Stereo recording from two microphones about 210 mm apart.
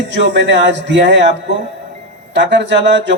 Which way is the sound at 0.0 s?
55° right (ahead or behind).